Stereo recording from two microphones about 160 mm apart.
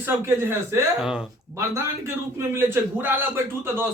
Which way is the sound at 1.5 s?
15° right (ahead or behind).